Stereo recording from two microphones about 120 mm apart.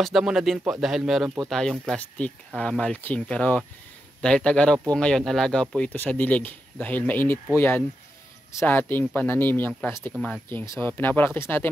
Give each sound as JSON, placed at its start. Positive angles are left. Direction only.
{"t": 0.0, "sound": "speech", "side_deg": -5}